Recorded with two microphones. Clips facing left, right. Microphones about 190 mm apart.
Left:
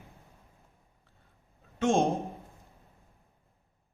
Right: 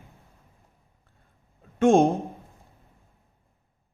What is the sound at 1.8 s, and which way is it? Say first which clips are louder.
Speech: right 8 dB; 55° right (ahead or behind).